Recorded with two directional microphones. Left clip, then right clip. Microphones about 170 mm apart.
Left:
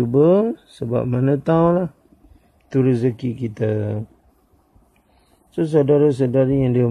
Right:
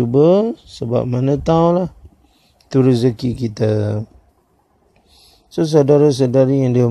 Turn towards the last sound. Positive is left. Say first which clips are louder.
# right 4 dB
turn(degrees=-20)  # may be behind; listen again after turning